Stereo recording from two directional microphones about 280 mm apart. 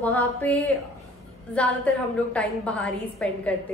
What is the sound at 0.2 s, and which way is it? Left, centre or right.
Speech, centre.